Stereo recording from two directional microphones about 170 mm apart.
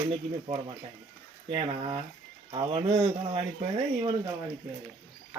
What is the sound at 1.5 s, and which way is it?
Speech, 35° right (ahead or behind).